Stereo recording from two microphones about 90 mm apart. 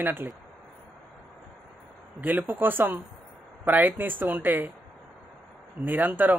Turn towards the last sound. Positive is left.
turn(degrees=-20)  # may be behind; listen again after turning